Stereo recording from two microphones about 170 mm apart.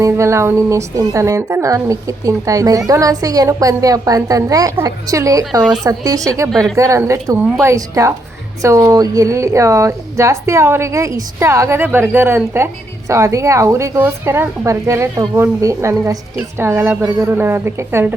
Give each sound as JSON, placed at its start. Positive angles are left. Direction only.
{"t": 0.0, "sound": "speech", "side_deg": -15}
{"t": 6.5, "sound": "speech", "side_deg": 0}
{"t": 6.7, "sound": "a woman's voice", "side_deg": -20}